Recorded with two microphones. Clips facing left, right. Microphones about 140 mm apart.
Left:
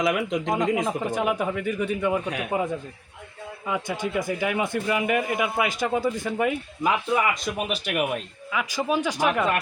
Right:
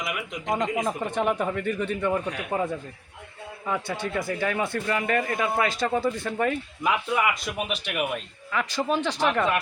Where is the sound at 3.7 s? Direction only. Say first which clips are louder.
Left 1 dB; 15° left (ahead or behind).